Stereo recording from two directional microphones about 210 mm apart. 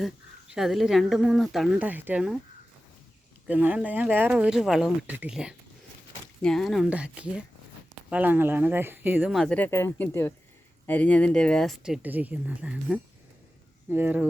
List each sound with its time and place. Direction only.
0.0 s speech: centre (ahead or behind)
3.4 s speech: 5° right (ahead or behind)